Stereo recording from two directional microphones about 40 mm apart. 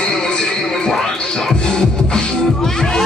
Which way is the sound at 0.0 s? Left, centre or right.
Left.